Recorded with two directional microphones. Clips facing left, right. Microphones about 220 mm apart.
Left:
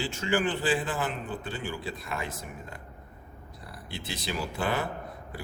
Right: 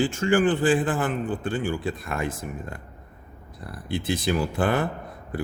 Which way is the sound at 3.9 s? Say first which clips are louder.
Right 11 dB; 50° right (ahead or behind).